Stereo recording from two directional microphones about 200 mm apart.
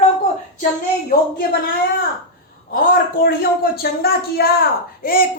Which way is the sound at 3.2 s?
50° left (ahead or behind).